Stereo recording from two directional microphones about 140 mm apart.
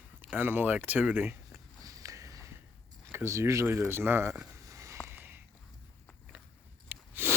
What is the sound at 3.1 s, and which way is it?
Speech, 20° right (ahead or behind).